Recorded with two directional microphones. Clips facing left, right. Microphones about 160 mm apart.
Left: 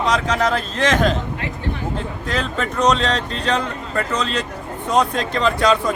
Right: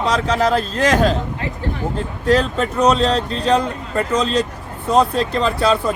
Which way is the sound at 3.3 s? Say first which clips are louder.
Right 4 dB; 35° right (ahead or behind).